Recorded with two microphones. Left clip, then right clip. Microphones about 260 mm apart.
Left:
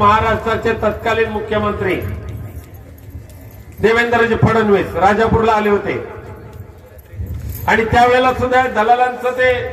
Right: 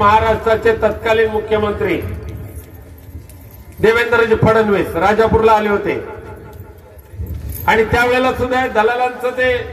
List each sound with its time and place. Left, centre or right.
0.0 s a man's voice: right
3.8 s a man's voice: right
7.6 s a man's voice: right